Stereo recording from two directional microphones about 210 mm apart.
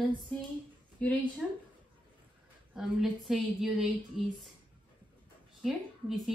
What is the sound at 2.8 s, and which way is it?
A woman's voice, centre (ahead or behind).